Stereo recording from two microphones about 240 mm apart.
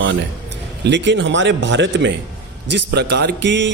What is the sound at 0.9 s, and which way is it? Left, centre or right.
A man's voice, right.